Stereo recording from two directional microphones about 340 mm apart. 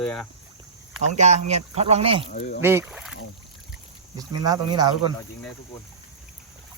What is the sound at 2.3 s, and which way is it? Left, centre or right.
Speech, left.